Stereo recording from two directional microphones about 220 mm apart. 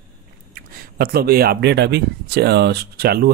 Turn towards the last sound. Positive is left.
turn(degrees=-45)  # may be behind; listen again after turning